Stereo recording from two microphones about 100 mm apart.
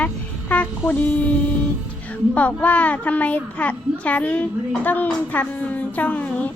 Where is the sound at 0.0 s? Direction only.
15° left (ahead or behind).